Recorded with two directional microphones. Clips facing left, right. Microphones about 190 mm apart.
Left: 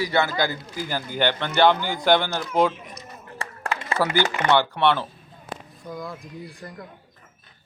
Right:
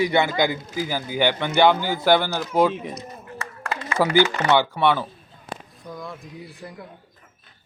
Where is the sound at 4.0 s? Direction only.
15° right (ahead or behind).